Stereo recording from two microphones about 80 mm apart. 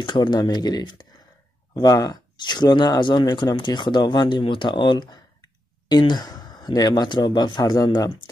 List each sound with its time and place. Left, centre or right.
0.0 s speech: left